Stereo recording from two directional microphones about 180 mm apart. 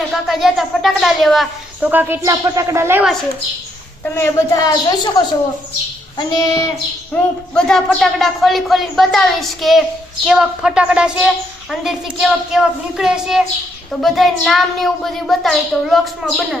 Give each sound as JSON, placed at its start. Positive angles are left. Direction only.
{"t": 0.1, "sound": "a woman's voice", "side_deg": 0}
{"t": 1.9, "sound": "a woman's voice", "side_deg": -10}
{"t": 4.0, "sound": "a woman's voice", "side_deg": 15}
{"t": 6.1, "sound": "child singing", "side_deg": 20}
{"t": 7.1, "sound": "a woman's voice", "side_deg": 5}